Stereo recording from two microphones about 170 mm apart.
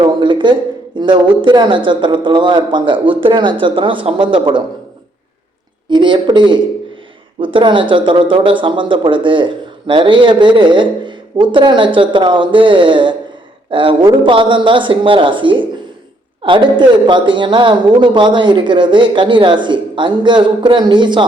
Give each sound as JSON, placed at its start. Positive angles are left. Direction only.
{"t": 0.0, "sound": "a sound", "side_deg": -25}
{"t": 0.9, "sound": "speech", "side_deg": -30}
{"t": 5.9, "sound": "speech", "side_deg": -30}